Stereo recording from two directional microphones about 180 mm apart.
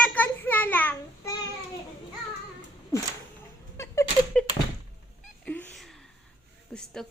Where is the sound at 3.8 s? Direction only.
15° left (ahead or behind).